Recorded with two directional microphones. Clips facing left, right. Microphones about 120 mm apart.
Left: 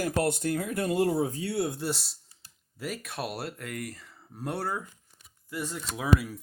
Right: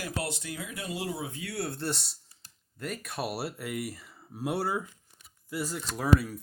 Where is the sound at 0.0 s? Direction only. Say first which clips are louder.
Left 8 dB; 45° left (ahead or behind); by 1.6 s 30° left (ahead or behind).